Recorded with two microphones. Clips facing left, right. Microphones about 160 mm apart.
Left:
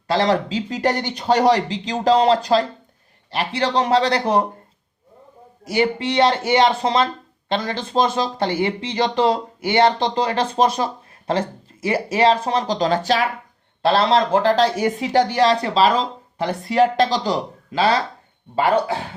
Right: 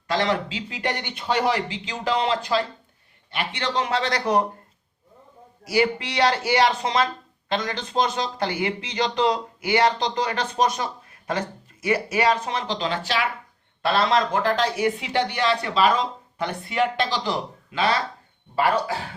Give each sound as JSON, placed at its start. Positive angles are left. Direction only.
{"t": 0.1, "sound": "speech", "side_deg": 35}
{"t": 5.7, "sound": "speech", "side_deg": 30}
{"t": 13.8, "sound": "speech", "side_deg": 30}